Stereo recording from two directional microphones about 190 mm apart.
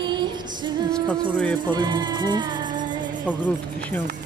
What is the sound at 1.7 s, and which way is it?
Speech, 25° right (ahead or behind).